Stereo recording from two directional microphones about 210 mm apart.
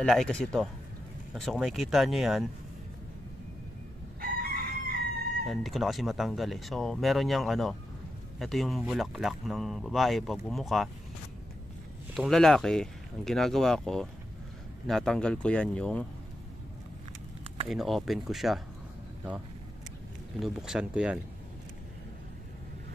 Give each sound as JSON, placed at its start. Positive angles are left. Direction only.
{"t": 0.0, "sound": "speech", "side_deg": 5}
{"t": 4.2, "sound": "chicken", "side_deg": -45}
{"t": 5.5, "sound": "speech", "side_deg": 0}
{"t": 12.1, "sound": "speech", "side_deg": 0}
{"t": 17.6, "sound": "speech", "side_deg": 0}
{"t": 20.3, "sound": "speech", "side_deg": 0}